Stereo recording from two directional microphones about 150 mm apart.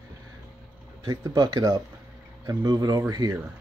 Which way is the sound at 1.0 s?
25° right (ahead or behind).